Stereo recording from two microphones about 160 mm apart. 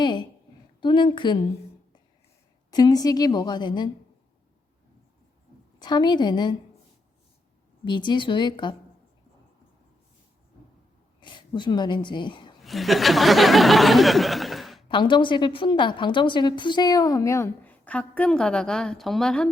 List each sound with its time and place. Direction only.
0.0 s a sound: 30° left (ahead or behind)
0.8 s a woman's voice: 30° left (ahead or behind)
2.7 s a woman's voice: 25° left (ahead or behind)
5.8 s a woman's voice: 25° left (ahead or behind)
7.9 s a woman's voice: 30° left (ahead or behind)
11.2 s speech: 30° left (ahead or behind)
12.6 s a sound: centre (ahead or behind)
14.8 s a woman's voice: 30° left (ahead or behind); by 19.5 s 5° left (ahead or behind)